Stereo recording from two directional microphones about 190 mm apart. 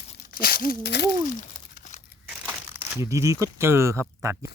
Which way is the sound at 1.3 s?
45° left (ahead or behind).